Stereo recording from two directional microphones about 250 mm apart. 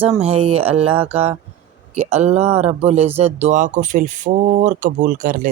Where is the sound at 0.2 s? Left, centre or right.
Right.